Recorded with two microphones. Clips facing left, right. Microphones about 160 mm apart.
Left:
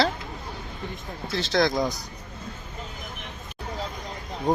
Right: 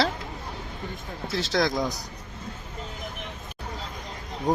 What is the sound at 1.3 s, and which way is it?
Speech, 5° right (ahead or behind).